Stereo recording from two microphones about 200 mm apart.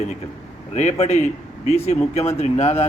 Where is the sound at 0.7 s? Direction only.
35° left (ahead or behind).